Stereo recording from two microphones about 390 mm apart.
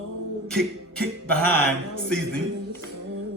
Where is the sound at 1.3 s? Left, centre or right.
Left.